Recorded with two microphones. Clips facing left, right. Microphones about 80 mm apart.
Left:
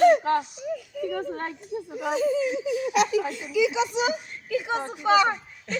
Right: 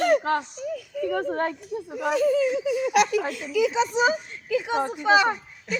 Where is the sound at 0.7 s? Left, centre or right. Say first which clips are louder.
Right 4 dB; right.